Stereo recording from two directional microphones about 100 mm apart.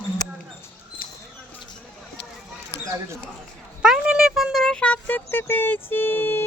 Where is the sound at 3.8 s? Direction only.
10° right (ahead or behind).